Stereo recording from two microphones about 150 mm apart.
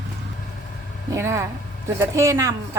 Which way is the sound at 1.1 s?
20° right (ahead or behind).